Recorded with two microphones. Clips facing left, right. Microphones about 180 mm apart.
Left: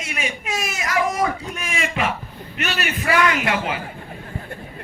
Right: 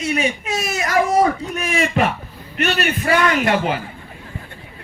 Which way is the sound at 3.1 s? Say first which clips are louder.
Right 3 dB; 40° right (ahead or behind).